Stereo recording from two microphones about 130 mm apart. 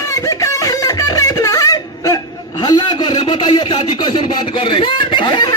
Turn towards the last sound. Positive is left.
turn(degrees=35)  # may be behind; listen again after turning